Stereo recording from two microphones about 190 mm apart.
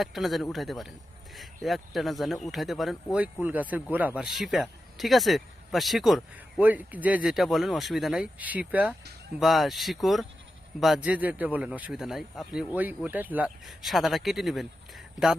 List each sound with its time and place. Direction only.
0.0 s speech: centre (ahead or behind)